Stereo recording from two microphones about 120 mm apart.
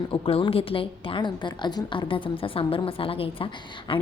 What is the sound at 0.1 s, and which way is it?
A woman's voice, 50° left (ahead or behind).